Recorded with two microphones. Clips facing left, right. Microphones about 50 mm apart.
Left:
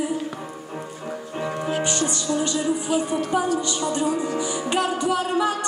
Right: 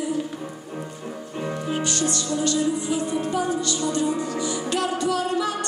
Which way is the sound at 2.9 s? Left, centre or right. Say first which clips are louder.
Left 2 dB; left.